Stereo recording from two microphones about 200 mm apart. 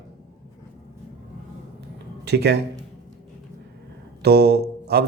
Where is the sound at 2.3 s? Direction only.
55° right (ahead or behind).